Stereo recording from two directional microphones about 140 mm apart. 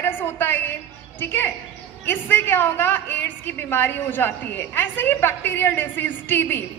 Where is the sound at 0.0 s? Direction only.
15° left (ahead or behind).